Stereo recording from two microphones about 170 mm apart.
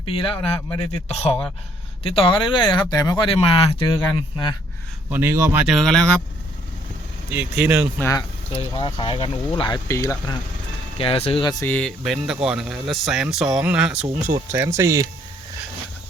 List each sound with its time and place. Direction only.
0.0 s speech: 30° left (ahead or behind)
5.1 s speech: 15° right (ahead or behind)
5.6 s speech: centre (ahead or behind)
7.3 s speech: 10° right (ahead or behind)
7.9 s speech: 15° left (ahead or behind)
8.5 s speech: 30° left (ahead or behind)
10.9 s speech: 35° left (ahead or behind)
11.6 s speech: 5° left (ahead or behind)
14.3 s speech: 15° right (ahead or behind)